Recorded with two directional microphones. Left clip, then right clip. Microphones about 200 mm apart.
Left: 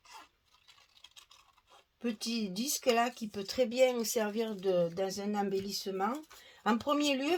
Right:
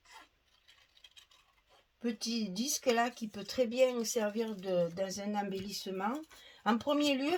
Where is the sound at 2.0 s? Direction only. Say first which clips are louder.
Left 1 dB; 35° left (ahead or behind).